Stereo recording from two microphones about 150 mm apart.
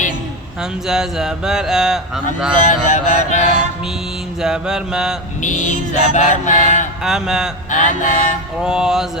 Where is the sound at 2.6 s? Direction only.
55° left (ahead or behind).